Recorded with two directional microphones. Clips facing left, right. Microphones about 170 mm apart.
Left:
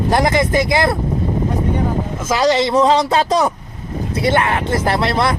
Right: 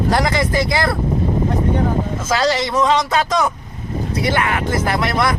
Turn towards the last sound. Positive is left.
turn(degrees=30)  # may be behind; listen again after turning